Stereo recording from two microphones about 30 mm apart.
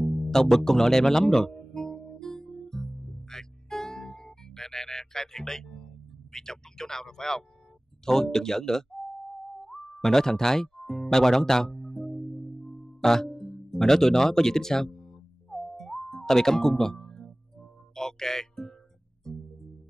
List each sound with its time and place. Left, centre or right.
0.3 s music: centre
2.9 s music: centre
3.3 s music: centre
6.3 s speech: centre
8.0 s music: centre
12.2 s music: centre